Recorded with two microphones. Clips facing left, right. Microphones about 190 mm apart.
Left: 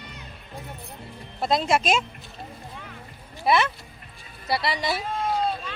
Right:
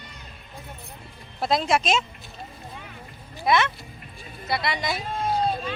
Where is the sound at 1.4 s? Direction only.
Centre (ahead or behind).